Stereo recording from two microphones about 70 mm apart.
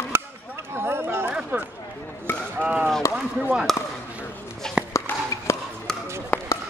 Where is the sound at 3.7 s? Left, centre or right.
Centre.